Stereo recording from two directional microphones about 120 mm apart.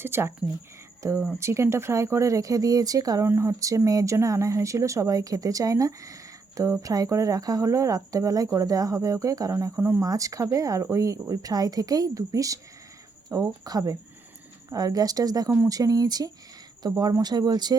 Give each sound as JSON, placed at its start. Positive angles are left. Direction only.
{"t": 0.0, "sound": "speech", "side_deg": -20}